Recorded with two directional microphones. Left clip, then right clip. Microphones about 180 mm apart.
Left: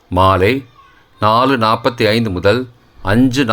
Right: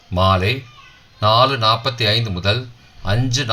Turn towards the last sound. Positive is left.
turn(degrees=55)  # may be behind; listen again after turning